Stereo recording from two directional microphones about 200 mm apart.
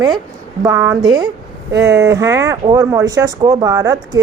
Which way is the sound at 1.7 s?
60° right (ahead or behind).